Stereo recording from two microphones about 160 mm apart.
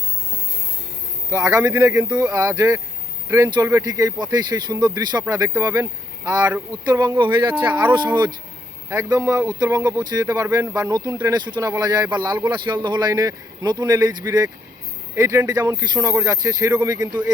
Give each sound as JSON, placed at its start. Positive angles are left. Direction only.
{"t": 1.3, "sound": "speech", "side_deg": -20}